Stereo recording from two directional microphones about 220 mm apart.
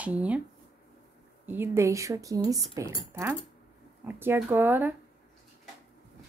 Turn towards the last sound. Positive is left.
turn(degrees=-10)  # may be behind; listen again after turning